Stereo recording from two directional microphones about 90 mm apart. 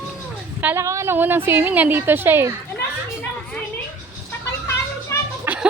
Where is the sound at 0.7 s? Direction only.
35° right (ahead or behind).